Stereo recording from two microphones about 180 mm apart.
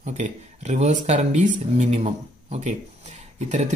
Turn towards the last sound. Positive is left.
turn(degrees=-40)  # may be behind; listen again after turning